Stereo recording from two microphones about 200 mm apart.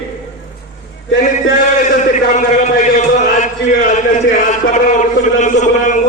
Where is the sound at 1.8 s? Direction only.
40° left (ahead or behind).